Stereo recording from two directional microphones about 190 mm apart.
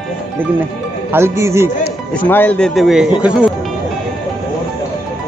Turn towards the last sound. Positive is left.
turn(degrees=-5)  # may be behind; listen again after turning